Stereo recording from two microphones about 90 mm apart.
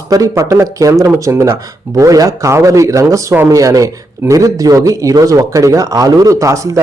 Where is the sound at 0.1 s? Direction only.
40° right (ahead or behind).